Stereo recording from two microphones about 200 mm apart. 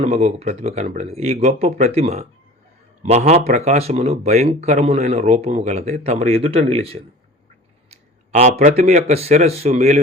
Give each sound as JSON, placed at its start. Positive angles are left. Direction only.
{"t": 0.0, "sound": "speech", "side_deg": -30}